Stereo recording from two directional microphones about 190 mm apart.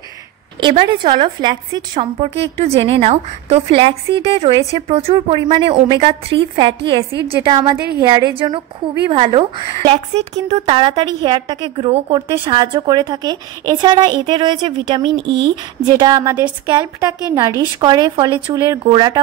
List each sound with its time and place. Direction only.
0.6 s a woman's voice: 25° right (ahead or behind)